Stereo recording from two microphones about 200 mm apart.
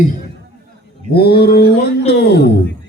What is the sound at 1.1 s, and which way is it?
Mantra, 55° left (ahead or behind).